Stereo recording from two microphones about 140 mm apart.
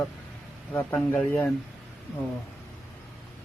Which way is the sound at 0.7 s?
15° left (ahead or behind).